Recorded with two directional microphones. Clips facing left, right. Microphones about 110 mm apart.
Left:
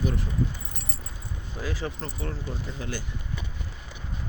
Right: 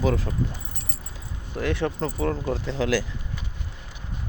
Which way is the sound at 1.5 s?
70° right (ahead or behind).